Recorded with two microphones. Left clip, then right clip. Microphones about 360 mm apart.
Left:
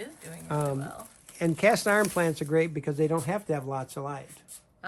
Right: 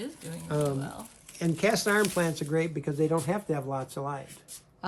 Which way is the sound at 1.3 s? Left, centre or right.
Centre.